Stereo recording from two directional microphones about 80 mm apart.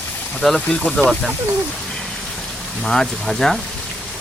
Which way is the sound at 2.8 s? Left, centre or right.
Centre.